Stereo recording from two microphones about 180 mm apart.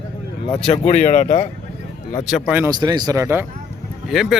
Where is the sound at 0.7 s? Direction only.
35° left (ahead or behind).